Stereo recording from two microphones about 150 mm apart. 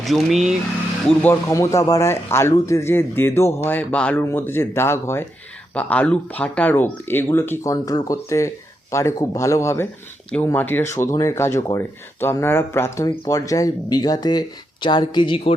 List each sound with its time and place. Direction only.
0.0 s speech: centre (ahead or behind)
1.2 s speech: 15° left (ahead or behind)